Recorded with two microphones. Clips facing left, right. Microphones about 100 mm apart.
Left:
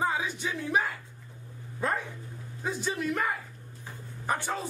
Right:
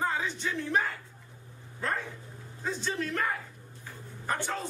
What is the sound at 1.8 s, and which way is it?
Speech, 15° left (ahead or behind).